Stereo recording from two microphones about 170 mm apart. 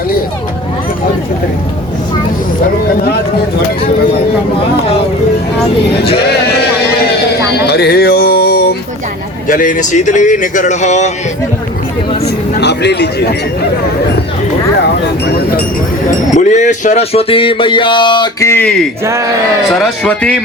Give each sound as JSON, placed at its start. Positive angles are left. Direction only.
{"t": 6.0, "sound": "speech", "side_deg": 70}
{"t": 6.8, "sound": "a sound", "side_deg": 65}
{"t": 7.7, "sound": "music", "side_deg": 70}
{"t": 9.5, "sound": "speech", "side_deg": 50}
{"t": 12.2, "sound": "speech", "side_deg": 80}
{"t": 16.0, "sound": "a man's voice", "side_deg": 45}
{"t": 19.7, "sound": "a man's voice", "side_deg": 5}